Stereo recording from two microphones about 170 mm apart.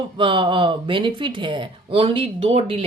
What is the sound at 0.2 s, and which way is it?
Speech, 30° right (ahead or behind).